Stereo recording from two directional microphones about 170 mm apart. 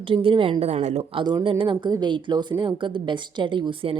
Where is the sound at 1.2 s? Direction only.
25° right (ahead or behind).